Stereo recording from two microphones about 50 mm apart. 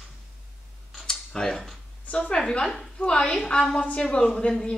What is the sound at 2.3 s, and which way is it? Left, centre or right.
A woman's voice, centre.